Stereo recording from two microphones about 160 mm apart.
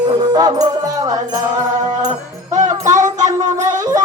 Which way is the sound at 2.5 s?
50° right (ahead or behind).